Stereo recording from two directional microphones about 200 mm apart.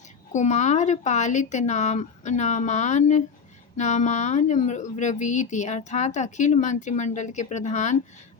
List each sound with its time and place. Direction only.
0.3 s speech: 35° left (ahead or behind)